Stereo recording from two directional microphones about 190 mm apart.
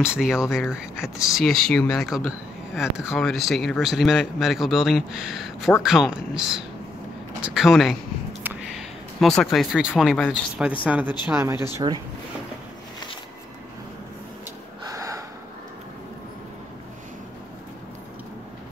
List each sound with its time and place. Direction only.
0.2 s speech: 5° right (ahead or behind)
8.5 s a sound: centre (ahead or behind)
10.9 s speech: 10° right (ahead or behind)
11.8 s speech: 25° right (ahead or behind)
14.9 s gasp: 15° right (ahead or behind)